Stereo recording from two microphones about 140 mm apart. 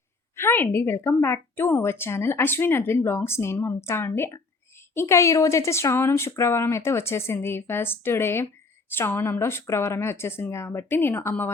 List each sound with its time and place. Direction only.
0.3 s a woman's voice: 15° left (ahead or behind)